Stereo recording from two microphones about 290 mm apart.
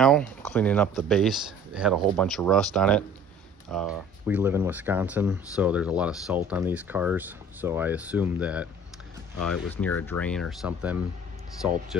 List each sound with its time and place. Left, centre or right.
0.0 s speech: centre